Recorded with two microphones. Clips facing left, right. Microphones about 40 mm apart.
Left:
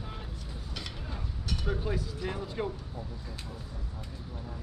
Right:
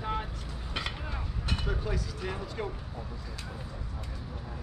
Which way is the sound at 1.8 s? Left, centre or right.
Centre.